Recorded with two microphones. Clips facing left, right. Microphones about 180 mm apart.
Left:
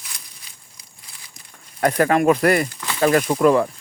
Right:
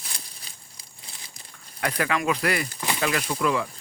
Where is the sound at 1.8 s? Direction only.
45° left (ahead or behind).